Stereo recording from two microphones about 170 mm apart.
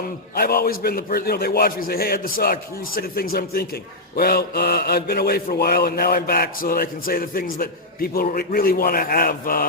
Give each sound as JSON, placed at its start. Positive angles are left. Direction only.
{"t": 0.3, "sound": "mantra", "side_deg": 65}